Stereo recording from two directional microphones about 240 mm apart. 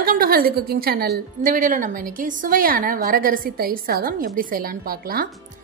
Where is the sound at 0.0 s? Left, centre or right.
Right.